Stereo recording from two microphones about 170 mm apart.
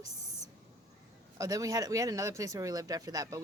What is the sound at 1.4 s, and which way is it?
Speech, 20° right (ahead or behind).